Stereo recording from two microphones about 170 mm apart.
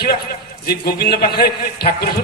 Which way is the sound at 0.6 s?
65° left (ahead or behind).